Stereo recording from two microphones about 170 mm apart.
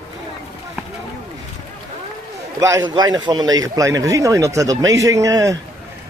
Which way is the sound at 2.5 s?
20° right (ahead or behind).